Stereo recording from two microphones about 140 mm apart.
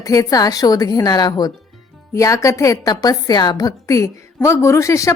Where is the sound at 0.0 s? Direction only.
25° left (ahead or behind).